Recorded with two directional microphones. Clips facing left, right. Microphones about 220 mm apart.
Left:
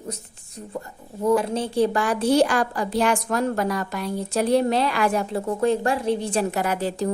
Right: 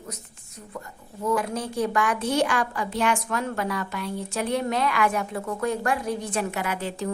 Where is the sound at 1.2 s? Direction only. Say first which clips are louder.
Left 5 dB; 30° left (ahead or behind).